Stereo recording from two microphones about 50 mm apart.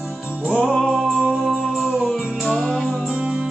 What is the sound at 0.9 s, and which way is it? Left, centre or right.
Music, centre.